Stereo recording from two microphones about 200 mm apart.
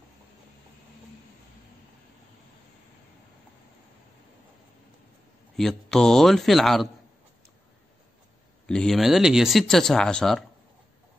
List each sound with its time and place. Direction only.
5.6 s speech: centre (ahead or behind)
8.6 s speech: 5° left (ahead or behind)